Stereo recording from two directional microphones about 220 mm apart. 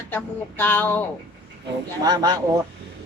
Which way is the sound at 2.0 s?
15° right (ahead or behind).